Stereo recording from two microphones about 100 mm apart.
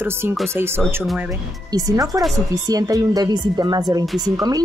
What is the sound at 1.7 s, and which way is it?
A woman's voice, 35° right (ahead or behind).